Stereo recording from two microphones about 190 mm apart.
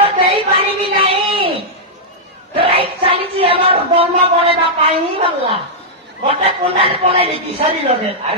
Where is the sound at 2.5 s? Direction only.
30° right (ahead or behind).